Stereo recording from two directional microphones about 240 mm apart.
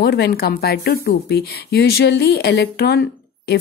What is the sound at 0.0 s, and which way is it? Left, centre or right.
A woman's voice, left.